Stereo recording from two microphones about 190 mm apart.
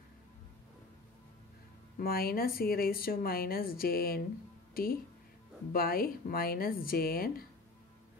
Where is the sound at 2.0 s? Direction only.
50° left (ahead or behind).